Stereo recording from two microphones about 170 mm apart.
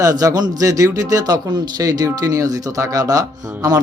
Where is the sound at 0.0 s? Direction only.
20° right (ahead or behind).